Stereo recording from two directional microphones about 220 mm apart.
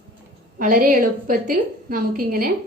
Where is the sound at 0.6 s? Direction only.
35° right (ahead or behind).